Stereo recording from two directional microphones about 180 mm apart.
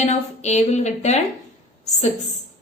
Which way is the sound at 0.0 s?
40° left (ahead or behind).